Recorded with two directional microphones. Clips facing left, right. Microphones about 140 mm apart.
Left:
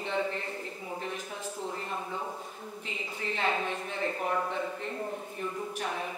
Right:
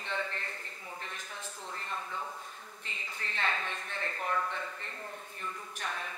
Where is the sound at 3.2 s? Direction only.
10° left (ahead or behind).